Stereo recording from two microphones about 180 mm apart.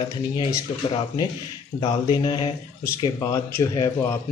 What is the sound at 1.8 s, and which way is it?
Speech, 25° left (ahead or behind).